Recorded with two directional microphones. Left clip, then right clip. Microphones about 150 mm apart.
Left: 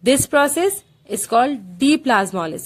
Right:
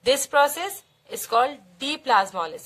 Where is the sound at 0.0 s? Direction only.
35° left (ahead or behind).